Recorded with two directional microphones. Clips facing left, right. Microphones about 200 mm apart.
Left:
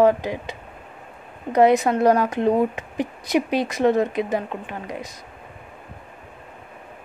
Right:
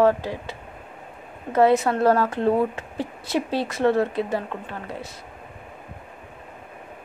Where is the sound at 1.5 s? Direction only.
15° left (ahead or behind).